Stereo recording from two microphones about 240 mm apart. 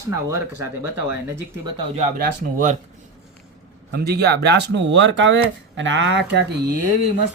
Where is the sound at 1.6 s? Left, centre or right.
Right.